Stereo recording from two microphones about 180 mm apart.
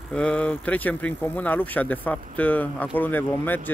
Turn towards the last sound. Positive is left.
turn(degrees=10)  # may be behind; listen again after turning